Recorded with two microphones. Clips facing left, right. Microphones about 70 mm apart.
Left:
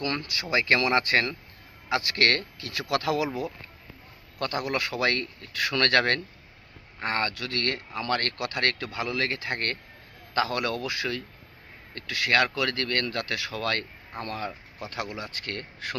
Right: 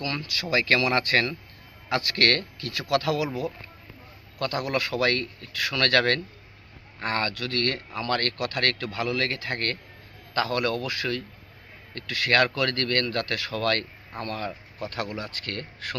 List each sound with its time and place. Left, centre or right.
0.0 s speech: left